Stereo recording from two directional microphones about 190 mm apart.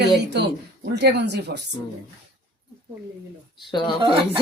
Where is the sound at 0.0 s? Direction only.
65° right (ahead or behind).